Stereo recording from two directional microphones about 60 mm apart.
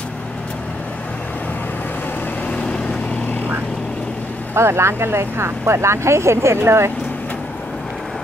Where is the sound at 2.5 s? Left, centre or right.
Centre.